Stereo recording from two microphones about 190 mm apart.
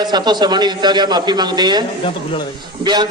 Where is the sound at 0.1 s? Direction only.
20° right (ahead or behind).